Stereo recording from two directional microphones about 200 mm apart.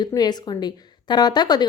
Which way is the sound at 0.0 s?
20° left (ahead or behind).